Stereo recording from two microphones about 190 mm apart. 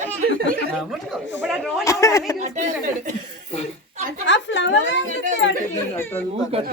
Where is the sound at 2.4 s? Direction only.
40° right (ahead or behind).